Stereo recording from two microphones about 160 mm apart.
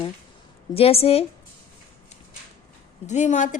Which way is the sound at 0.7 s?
35° left (ahead or behind).